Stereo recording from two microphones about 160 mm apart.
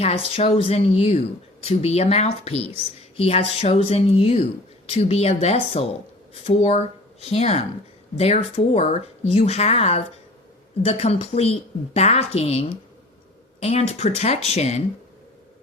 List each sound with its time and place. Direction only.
0.3 s speech: 35° left (ahead or behind)